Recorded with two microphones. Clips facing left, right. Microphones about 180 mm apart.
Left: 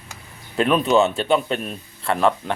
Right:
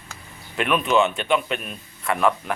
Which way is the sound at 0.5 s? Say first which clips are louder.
Left 3 dB; 35° left (ahead or behind).